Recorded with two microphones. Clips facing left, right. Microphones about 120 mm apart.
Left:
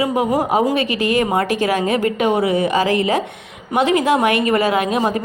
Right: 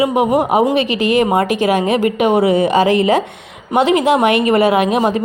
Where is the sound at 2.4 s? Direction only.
30° right (ahead or behind).